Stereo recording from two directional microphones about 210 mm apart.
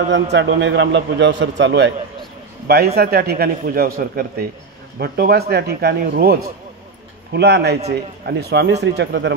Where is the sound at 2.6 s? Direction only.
45° right (ahead or behind).